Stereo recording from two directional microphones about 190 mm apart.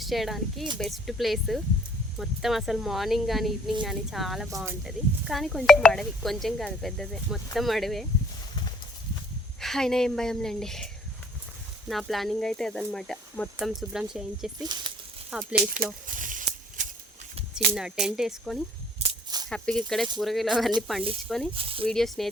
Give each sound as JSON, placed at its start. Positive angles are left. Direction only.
{"t": 0.0, "sound": "speech", "side_deg": 0}
{"t": 9.6, "sound": "speech", "side_deg": 0}
{"t": 11.9, "sound": "speech", "side_deg": 0}
{"t": 14.6, "sound": "speech", "side_deg": -20}
{"t": 15.3, "sound": "speech", "side_deg": -5}
{"t": 15.5, "sound": "speech", "side_deg": -50}
{"t": 16.0, "sound": "a sound", "side_deg": -45}
{"t": 17.7, "sound": "speech", "side_deg": -5}
{"t": 21.5, "sound": "speech", "side_deg": -30}
{"t": 21.8, "sound": "speech", "side_deg": 0}